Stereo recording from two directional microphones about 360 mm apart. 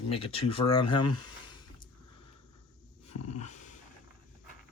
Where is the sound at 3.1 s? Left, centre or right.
Left.